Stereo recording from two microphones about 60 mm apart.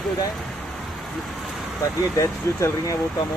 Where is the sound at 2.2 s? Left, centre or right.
Left.